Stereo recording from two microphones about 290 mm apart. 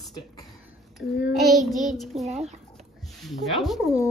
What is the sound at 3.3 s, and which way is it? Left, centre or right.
Child singing, centre.